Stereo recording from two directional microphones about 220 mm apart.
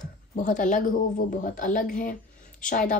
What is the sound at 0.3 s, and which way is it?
A woman's voice, 35° left (ahead or behind).